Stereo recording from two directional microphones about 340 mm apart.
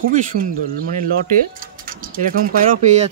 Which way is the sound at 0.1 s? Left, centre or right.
Right.